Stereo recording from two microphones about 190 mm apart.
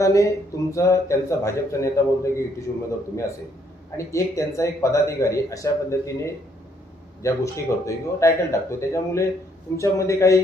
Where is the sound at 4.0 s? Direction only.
15° left (ahead or behind).